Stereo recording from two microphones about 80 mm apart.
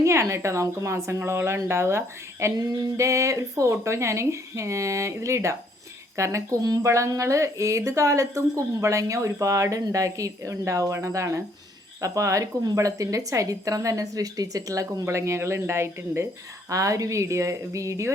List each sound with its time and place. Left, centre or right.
0.0 s speech: right
6.6 s a woman's voice: right
6.8 s a woman's voice: right
15.0 s speech: right
16.6 s speech: right